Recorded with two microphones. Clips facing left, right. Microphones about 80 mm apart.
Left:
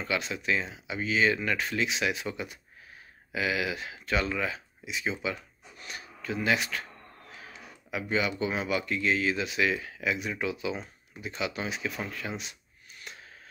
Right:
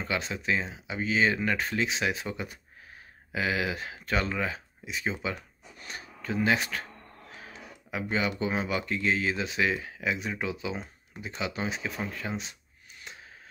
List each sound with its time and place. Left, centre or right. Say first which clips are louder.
0.0 s speech: even; right